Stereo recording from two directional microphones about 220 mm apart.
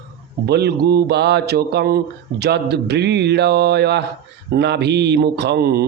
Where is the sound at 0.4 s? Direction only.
50° right (ahead or behind).